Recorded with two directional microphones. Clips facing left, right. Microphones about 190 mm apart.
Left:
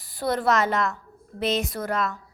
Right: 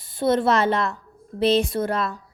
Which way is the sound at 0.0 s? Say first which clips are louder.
Right 4 dB; 25° right (ahead or behind).